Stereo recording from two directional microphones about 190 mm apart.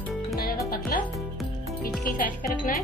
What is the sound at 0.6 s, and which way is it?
Music, 50° left (ahead or behind).